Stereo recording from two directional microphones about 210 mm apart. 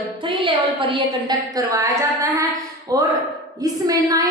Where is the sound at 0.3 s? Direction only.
25° right (ahead or behind).